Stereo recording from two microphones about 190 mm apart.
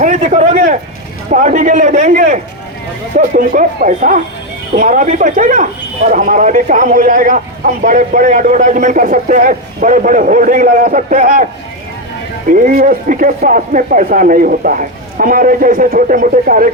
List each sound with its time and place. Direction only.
0.0 s a man's voice: 40° right (ahead or behind)
12.5 s speech: 45° right (ahead or behind)